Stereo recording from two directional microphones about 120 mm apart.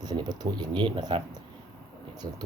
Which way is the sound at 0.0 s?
35° right (ahead or behind).